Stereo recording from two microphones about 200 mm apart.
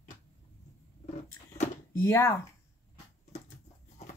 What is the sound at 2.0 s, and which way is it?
Speech, 10° left (ahead or behind).